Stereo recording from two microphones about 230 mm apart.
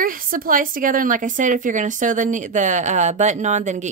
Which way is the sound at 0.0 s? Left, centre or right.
Right.